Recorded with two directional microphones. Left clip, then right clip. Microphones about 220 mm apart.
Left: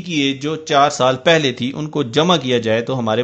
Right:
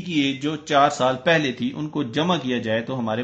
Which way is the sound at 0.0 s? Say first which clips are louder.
Left 4 dB; 35° left (ahead or behind).